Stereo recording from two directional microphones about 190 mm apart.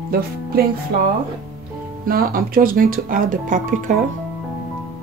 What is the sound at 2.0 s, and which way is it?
Speech, 50° right (ahead or behind).